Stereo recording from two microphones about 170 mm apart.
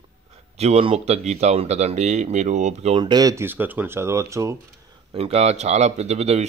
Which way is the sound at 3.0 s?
25° right (ahead or behind).